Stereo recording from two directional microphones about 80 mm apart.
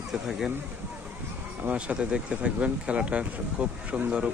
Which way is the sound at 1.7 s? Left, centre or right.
Centre.